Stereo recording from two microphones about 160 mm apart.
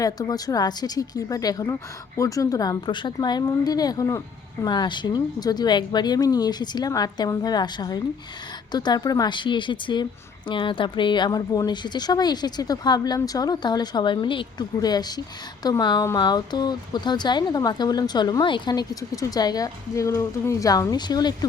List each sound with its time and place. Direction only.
0.0 s a woman's voice: 25° left (ahead or behind)